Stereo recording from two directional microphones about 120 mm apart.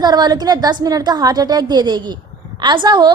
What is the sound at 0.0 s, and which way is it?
A woman's voice, 35° right (ahead or behind).